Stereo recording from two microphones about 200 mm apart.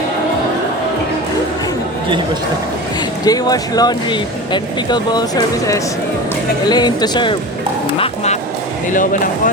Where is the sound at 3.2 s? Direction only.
20° left (ahead or behind).